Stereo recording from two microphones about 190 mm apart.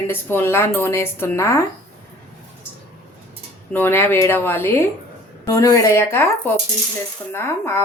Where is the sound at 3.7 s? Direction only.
10° left (ahead or behind).